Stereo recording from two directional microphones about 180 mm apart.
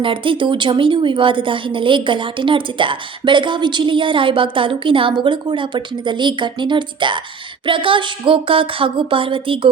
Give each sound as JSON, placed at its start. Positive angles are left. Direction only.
{"t": 0.0, "sound": "a woman's voice", "side_deg": -30}